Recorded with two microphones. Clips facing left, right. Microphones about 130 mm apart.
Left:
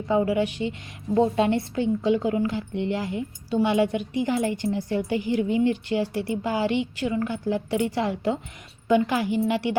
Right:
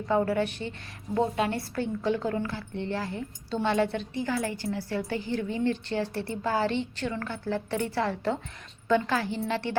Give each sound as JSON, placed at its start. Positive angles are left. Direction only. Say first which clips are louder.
{"t": 0.1, "sound": "a woman's voice", "louder": "left 3 dB", "side_deg": 15}